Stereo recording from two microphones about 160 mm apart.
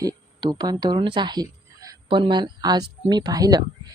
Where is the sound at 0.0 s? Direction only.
25° right (ahead or behind).